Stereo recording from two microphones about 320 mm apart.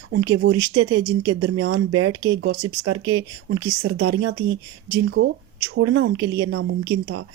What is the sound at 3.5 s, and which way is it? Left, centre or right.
Speech, right.